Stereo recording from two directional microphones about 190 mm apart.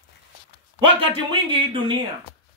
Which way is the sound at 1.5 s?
25° right (ahead or behind).